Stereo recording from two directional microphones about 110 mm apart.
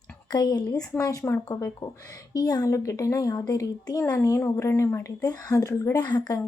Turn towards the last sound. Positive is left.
turn(degrees=35)  # may be behind; listen again after turning